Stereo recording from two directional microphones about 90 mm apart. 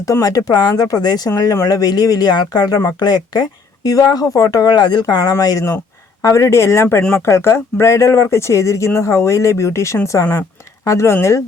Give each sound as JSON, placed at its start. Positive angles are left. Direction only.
{"t": 0.0, "sound": "speech", "side_deg": 40}
{"t": 5.1, "sound": "speech", "side_deg": 40}
{"t": 6.2, "sound": "speech", "side_deg": 30}